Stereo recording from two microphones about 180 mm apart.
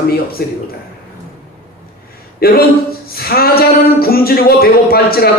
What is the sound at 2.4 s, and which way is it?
Speech, 55° left (ahead or behind).